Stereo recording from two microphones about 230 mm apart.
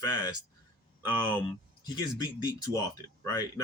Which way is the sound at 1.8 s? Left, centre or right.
Centre.